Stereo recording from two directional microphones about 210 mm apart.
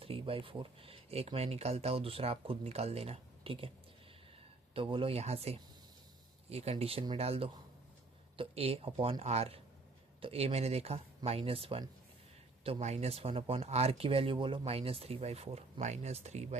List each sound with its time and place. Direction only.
0.0 s speech: 25° right (ahead or behind)
4.7 s speech: 25° right (ahead or behind)